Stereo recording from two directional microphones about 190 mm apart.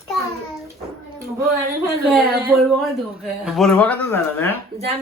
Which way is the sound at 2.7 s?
Centre (ahead or behind).